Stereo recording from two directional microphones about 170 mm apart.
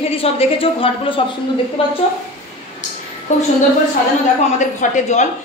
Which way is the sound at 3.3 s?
45° left (ahead or behind).